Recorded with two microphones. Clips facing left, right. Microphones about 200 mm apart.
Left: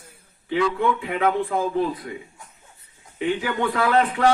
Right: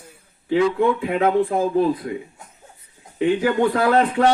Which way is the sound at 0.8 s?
35° right (ahead or behind).